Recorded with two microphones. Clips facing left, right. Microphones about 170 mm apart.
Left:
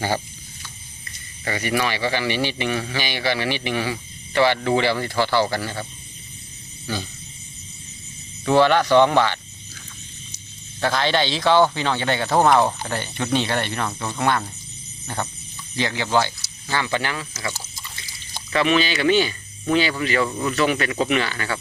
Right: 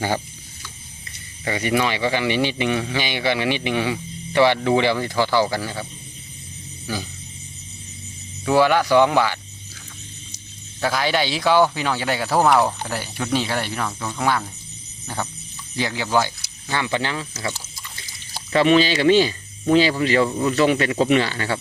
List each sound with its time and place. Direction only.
1.5 s speech: 20° right (ahead or behind)
6.8 s speech: 10° right (ahead or behind)
8.4 s speech: 10° right (ahead or behind)
10.8 s speech: 10° right (ahead or behind)
15.0 s a sound: 5° right (ahead or behind)
15.7 s speech: 10° right (ahead or behind)
18.5 s speech: 30° right (ahead or behind)